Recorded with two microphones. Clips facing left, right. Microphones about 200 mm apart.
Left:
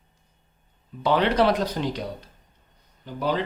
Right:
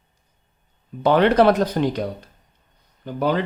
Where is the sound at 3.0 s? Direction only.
55° right (ahead or behind).